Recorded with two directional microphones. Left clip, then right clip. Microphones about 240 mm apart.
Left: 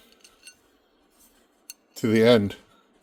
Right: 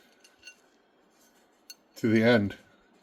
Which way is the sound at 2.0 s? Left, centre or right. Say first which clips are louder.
Left 5 dB; left.